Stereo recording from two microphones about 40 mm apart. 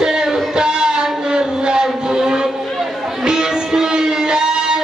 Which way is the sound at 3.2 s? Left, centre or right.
Centre.